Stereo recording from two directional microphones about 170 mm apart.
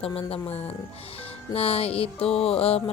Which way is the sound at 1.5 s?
35° left (ahead or behind).